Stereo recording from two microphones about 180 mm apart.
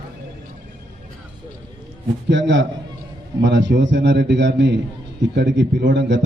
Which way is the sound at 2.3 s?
90° right.